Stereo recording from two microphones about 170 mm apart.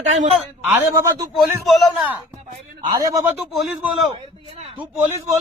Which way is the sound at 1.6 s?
Centre (ahead or behind).